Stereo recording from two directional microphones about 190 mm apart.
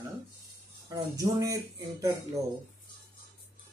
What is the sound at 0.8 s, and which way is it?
Speech, 15° right (ahead or behind).